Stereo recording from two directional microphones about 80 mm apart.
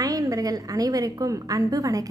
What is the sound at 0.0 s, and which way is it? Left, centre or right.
A woman's voice, right.